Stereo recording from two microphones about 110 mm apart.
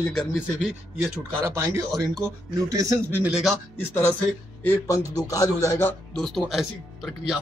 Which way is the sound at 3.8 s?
20° left (ahead or behind).